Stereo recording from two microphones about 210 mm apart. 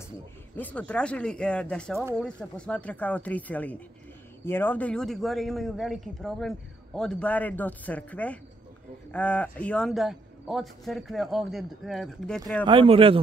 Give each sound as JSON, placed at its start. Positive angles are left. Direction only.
{"t": 0.6, "sound": "a man's voice", "side_deg": 5}
{"t": 12.6, "sound": "speech", "side_deg": -25}